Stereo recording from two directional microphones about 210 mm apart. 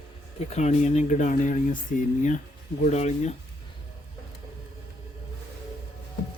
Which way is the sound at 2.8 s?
35° left (ahead or behind).